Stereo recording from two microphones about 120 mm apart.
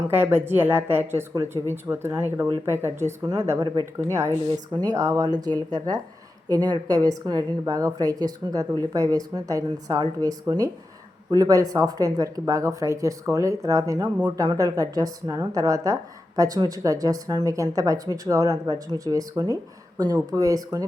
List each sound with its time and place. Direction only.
0.1 s a woman's voice: 15° right (ahead or behind)